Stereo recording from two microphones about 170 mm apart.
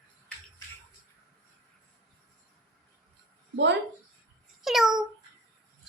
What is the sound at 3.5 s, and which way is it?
Speech, 90° right.